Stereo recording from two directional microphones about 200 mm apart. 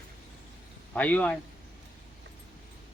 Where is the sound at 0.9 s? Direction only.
5° left (ahead or behind).